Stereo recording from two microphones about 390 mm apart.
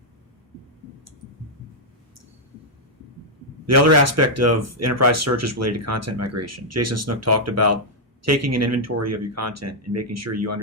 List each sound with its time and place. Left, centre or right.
3.7 s speech: right